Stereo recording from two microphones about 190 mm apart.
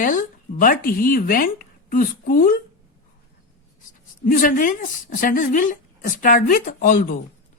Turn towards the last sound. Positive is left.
turn(degrees=45)  # may be behind; listen again after turning